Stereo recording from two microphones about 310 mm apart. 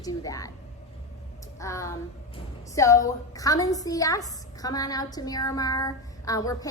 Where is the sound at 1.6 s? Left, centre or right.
Centre.